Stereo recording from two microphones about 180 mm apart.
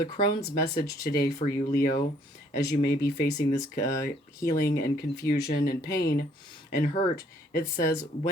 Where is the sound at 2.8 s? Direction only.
55° left (ahead or behind).